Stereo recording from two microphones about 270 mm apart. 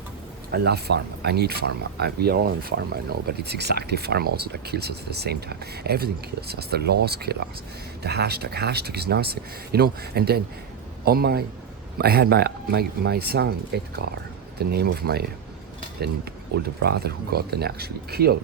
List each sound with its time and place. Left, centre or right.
0.5 s speech: right
16.5 s speech: right